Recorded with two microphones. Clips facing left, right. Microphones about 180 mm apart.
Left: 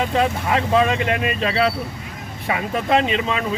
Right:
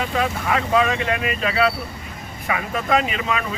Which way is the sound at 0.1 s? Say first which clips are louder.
Left 2 dB; 25° left (ahead or behind).